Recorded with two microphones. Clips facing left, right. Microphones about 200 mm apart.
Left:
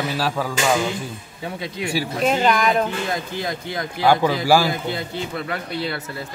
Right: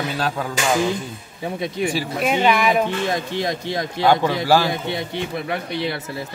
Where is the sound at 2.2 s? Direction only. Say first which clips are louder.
Even; 5° right (ahead or behind).